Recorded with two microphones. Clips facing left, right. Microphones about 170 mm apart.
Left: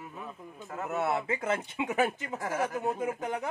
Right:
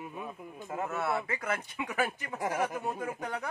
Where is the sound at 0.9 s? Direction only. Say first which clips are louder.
Left 5 dB; 20° left (ahead or behind).